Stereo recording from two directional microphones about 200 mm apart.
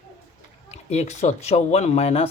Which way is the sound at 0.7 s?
35° left (ahead or behind).